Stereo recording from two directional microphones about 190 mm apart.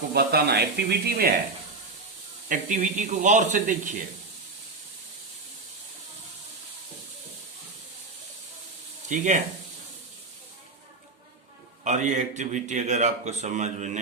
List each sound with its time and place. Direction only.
0.1 s speech: 55° right (ahead or behind)
2.5 s a man's voice: 40° right (ahead or behind)
9.0 s speech: 40° right (ahead or behind)
11.8 s a man's voice: 40° right (ahead or behind)